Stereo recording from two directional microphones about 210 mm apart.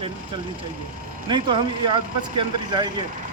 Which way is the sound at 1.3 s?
25° right (ahead or behind).